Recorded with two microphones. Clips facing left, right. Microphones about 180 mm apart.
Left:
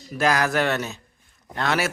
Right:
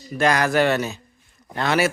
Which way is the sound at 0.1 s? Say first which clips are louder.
Right 2 dB; centre (ahead or behind).